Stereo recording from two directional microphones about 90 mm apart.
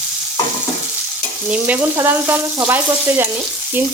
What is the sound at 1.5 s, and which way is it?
Frying, 15° right (ahead or behind).